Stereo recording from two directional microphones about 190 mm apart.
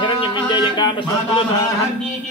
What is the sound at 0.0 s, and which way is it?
Music, 25° left (ahead or behind).